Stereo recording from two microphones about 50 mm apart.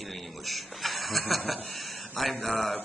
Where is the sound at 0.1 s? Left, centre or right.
Centre.